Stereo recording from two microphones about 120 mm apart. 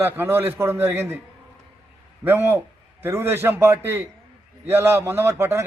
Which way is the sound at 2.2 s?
20° right (ahead or behind).